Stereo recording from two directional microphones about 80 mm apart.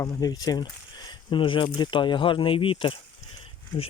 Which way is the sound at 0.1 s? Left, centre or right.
Left.